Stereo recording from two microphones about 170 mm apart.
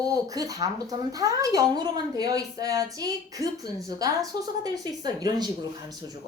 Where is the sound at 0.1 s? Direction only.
20° right (ahead or behind).